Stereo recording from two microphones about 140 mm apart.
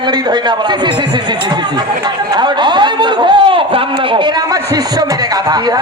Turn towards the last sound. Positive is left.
turn(degrees=-30)  # may be behind; listen again after turning